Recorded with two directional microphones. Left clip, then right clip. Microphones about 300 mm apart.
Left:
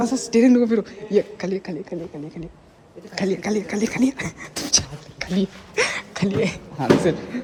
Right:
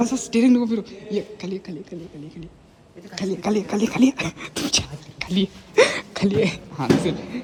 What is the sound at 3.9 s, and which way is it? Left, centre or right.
Speech, right.